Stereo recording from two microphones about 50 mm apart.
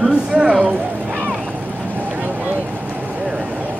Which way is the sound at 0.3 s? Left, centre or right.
Centre.